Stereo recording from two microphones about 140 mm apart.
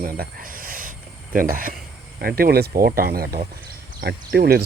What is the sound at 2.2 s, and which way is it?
Speech, 90° right.